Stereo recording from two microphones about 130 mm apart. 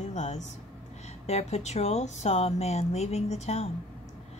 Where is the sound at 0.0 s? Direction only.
65° left (ahead or behind).